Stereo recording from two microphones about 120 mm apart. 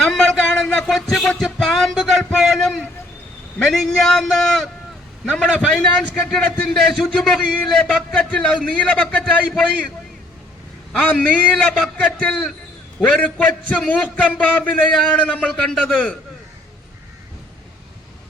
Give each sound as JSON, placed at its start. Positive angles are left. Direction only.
{"t": 0.0, "sound": "music", "side_deg": 5}
{"t": 3.6, "sound": "a man's voice", "side_deg": 5}
{"t": 10.9, "sound": "a man's voice", "side_deg": 10}